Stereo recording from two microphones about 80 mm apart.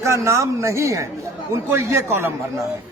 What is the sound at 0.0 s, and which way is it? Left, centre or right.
A man's voice, right.